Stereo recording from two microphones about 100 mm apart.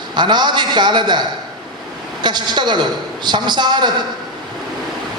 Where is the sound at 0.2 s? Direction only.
50° right (ahead or behind).